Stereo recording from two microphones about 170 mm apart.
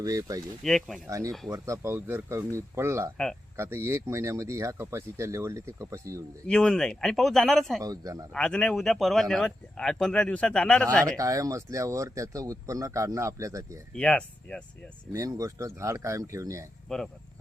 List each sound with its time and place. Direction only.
0.0 s a man's voice: 20° right (ahead or behind)
0.6 s speech: centre (ahead or behind)
1.0 s a man's voice: 20° right (ahead or behind)
6.5 s speech: 5° left (ahead or behind)
7.8 s a man's voice: 20° right (ahead or behind)
8.3 s speech: 5° left (ahead or behind)
11.2 s speech: 20° right (ahead or behind)
13.9 s speech: 5° left (ahead or behind)
15.1 s speech: 20° right (ahead or behind)
16.9 s speech: 5° left (ahead or behind)